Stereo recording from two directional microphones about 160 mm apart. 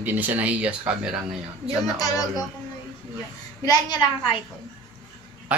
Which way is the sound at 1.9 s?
20° left (ahead or behind).